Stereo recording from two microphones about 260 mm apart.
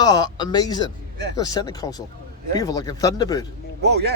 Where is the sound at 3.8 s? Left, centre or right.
Right.